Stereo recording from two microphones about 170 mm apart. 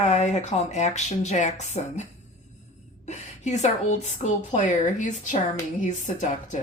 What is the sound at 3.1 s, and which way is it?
Speech, 40° left (ahead or behind).